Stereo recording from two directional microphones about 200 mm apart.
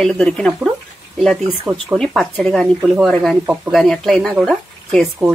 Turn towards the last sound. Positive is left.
turn(degrees=0)  # may be behind; listen again after turning